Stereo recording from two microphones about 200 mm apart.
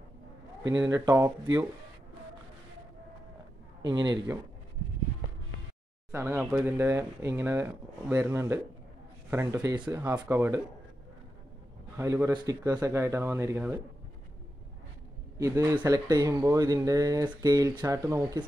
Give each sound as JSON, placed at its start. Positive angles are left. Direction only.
{"t": 0.7, "sound": "speech", "side_deg": -15}
{"t": 3.9, "sound": "a man's voice", "side_deg": -20}
{"t": 6.1, "sound": "speech", "side_deg": -10}
{"t": 12.0, "sound": "speech", "side_deg": -15}
{"t": 15.3, "sound": "speech", "side_deg": -15}